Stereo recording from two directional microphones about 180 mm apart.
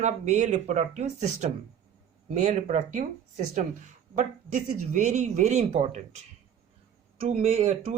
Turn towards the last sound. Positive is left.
turn(degrees=-35)  # may be behind; listen again after turning